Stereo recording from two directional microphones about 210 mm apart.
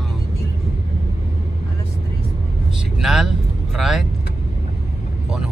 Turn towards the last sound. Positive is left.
turn(degrees=0)  # may be behind; listen again after turning